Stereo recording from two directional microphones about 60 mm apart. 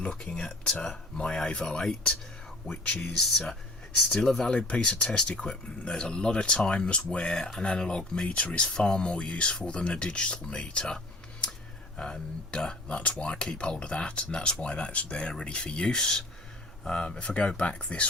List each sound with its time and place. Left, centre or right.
0.2 s speech: centre